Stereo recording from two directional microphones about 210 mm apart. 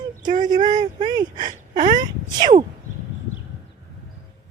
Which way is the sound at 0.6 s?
35° right (ahead or behind).